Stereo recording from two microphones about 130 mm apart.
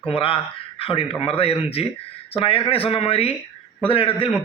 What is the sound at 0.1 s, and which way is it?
A man's voice, 45° left (ahead or behind).